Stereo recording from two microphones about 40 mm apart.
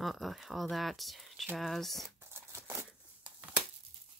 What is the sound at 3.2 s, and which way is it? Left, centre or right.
Crumpling, right.